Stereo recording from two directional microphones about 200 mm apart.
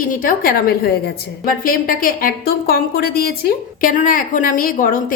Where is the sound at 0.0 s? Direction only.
45° left (ahead or behind).